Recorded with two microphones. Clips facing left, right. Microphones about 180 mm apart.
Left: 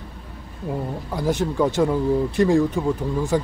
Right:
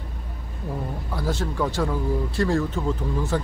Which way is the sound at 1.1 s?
15° left (ahead or behind).